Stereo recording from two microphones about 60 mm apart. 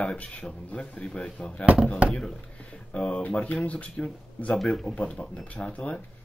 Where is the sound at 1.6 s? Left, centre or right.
Right.